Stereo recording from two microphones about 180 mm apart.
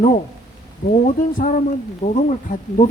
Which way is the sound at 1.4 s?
45° left (ahead or behind).